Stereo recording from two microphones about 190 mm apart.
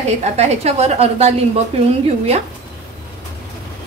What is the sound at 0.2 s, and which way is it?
A woman's voice, 35° right (ahead or behind).